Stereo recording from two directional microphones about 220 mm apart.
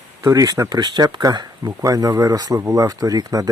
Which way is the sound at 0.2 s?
15° right (ahead or behind).